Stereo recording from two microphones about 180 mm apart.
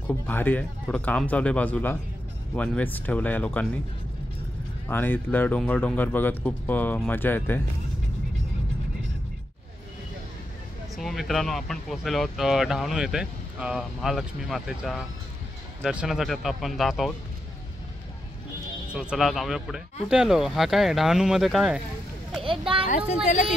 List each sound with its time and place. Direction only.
0.1 s speech: 10° left (ahead or behind)
4.8 s speech: 10° left (ahead or behind)
11.0 s speech: centre (ahead or behind)
18.9 s speech: centre (ahead or behind)
22.4 s children playing: 30° right (ahead or behind)